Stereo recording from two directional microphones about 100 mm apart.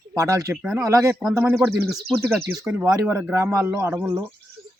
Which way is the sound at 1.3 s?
25° right (ahead or behind).